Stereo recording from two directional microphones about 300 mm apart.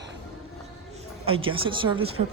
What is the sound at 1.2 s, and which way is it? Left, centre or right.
Speech, centre.